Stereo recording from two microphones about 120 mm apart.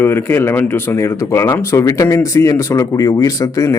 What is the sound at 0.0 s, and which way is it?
Speech, 20° left (ahead or behind).